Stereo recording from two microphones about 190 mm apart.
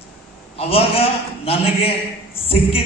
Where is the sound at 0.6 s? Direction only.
30° left (ahead or behind).